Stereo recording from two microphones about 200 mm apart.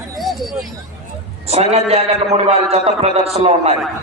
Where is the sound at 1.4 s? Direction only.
30° right (ahead or behind).